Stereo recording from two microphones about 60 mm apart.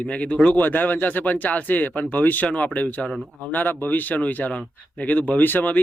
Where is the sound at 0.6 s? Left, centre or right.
Left.